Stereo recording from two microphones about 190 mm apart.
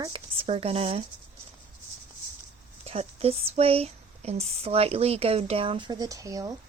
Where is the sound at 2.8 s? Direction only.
30° right (ahead or behind).